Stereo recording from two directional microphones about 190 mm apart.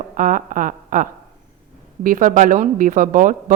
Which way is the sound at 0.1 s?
45° right (ahead or behind).